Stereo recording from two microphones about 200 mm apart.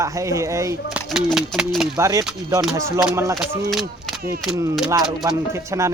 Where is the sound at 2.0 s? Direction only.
15° right (ahead or behind).